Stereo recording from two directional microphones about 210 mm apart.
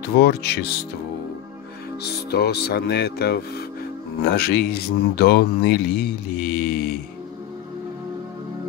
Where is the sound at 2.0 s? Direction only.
50° left (ahead or behind).